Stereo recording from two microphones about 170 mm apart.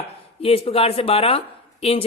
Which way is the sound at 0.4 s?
35° left (ahead or behind).